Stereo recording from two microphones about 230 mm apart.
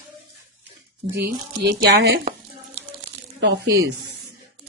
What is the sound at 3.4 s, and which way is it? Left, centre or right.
Speech, right.